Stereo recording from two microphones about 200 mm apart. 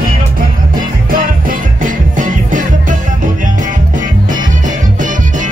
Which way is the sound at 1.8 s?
40° right (ahead or behind).